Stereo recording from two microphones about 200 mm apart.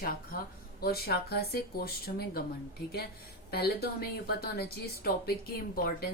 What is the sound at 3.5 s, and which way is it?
A woman's voice, 50° left (ahead or behind).